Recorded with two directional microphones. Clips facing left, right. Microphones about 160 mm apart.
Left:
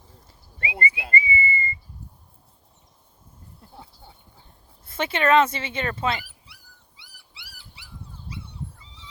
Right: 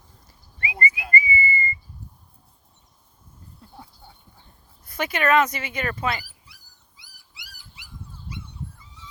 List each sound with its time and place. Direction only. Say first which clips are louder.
0.3 s whistling: left 1 dB; 25° left (ahead or behind)
4.8 s speech: left 1 dB; 25° left (ahead or behind)
7.0 s dog: even; 30° left (ahead or behind)